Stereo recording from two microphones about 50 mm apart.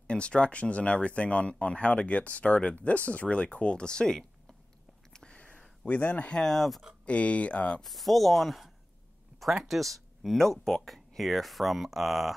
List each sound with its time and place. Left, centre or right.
0.0 s speech: left
5.1 s a sound: centre
6.3 s speech: centre
7.1 s speech: left
7.8 s speech: centre